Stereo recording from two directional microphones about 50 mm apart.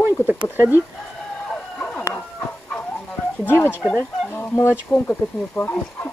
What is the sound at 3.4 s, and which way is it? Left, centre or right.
Speech, left.